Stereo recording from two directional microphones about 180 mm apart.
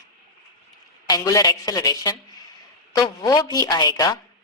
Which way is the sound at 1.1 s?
20° left (ahead or behind).